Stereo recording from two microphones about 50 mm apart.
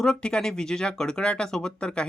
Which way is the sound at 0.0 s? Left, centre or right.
Centre.